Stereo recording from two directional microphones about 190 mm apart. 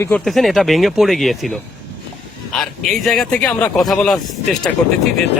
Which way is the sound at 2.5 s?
Centre (ahead or behind).